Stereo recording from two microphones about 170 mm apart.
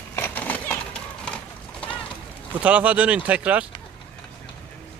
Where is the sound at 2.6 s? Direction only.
10° right (ahead or behind).